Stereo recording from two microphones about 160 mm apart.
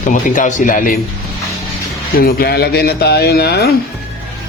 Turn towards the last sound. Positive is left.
turn(degrees=90)